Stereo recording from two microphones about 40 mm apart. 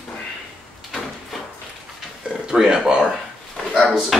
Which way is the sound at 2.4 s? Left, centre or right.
Centre.